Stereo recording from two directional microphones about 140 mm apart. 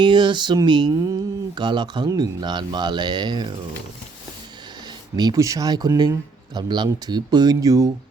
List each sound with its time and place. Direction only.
0.0 s speech: 35° right (ahead or behind)
5.1 s speech: 30° right (ahead or behind)